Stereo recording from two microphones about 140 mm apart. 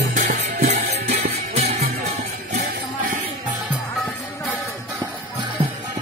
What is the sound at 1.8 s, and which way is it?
Music, 90° right.